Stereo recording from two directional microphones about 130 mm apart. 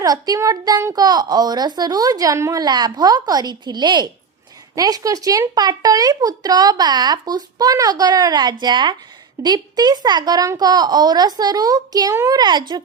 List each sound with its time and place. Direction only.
0.0 s a woman's voice: 30° right (ahead or behind)